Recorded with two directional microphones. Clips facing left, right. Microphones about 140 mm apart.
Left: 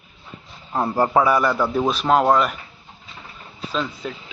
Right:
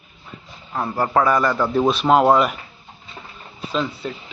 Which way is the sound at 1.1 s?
10° left (ahead or behind).